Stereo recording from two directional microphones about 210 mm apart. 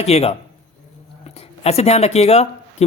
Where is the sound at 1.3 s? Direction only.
30° left (ahead or behind).